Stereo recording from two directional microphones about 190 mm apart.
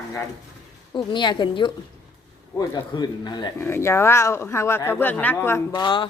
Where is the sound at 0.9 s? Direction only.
25° left (ahead or behind).